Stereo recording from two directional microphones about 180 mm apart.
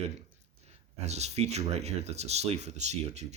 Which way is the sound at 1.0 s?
35° right (ahead or behind).